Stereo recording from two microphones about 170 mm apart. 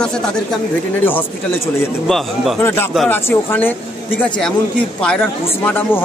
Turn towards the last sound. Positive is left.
turn(degrees=10)  # may be behind; listen again after turning